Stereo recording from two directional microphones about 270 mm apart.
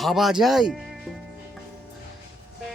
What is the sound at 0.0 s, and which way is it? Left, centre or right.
Speech, centre.